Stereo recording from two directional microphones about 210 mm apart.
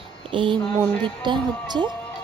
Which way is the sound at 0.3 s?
25° right (ahead or behind).